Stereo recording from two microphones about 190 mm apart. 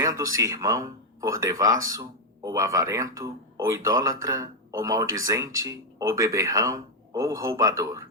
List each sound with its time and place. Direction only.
0.0 s speech: 15° right (ahead or behind)